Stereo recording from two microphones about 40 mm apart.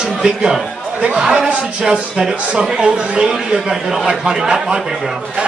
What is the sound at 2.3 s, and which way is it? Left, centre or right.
Speech, right.